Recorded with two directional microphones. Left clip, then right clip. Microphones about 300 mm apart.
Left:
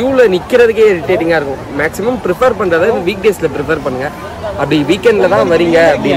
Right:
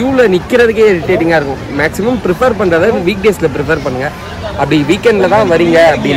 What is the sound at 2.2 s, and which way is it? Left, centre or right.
Speech, right.